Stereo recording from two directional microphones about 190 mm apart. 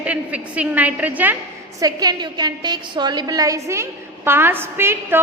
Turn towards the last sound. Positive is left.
turn(degrees=-10)  # may be behind; listen again after turning